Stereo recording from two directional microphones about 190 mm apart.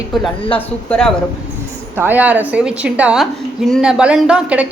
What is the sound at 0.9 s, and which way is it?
Speech, 5° left (ahead or behind).